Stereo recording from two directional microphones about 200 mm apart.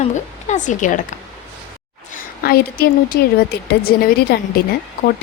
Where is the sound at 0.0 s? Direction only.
35° left (ahead or behind).